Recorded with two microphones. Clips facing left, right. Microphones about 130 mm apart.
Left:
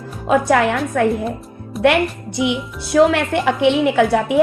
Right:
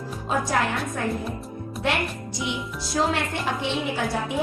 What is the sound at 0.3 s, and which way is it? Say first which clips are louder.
Speech: left 10 dB; 70° left (ahead or behind).